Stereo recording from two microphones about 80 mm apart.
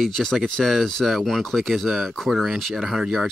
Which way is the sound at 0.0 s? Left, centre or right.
Centre.